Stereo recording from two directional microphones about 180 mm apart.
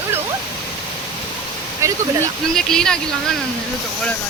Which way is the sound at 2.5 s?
5° left (ahead or behind).